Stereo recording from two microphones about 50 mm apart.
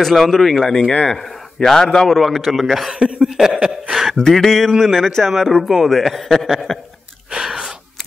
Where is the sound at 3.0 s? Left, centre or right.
Right.